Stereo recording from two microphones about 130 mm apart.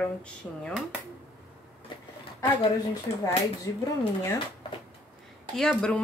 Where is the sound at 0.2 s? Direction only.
5° left (ahead or behind).